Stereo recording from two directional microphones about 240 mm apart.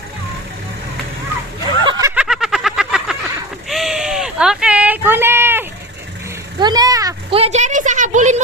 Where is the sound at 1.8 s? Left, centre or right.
Centre.